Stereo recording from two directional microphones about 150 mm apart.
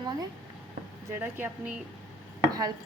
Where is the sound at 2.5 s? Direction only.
25° right (ahead or behind).